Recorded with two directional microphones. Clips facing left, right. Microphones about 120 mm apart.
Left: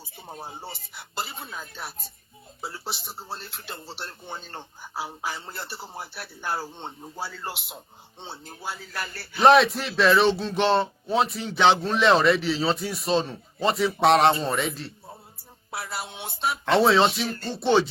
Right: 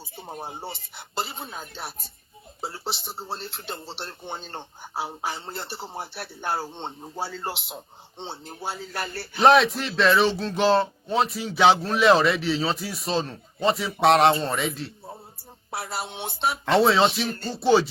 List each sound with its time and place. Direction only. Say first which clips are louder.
0.3 s speech: right 3 dB; 25° right (ahead or behind)
9.4 s speech: even; centre (ahead or behind)
15.7 s speech: right 2 dB; 30° right (ahead or behind)
16.6 s speech: even; centre (ahead or behind)